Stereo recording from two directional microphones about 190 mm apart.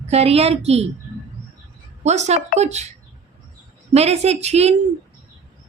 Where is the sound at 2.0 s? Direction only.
35° right (ahead or behind).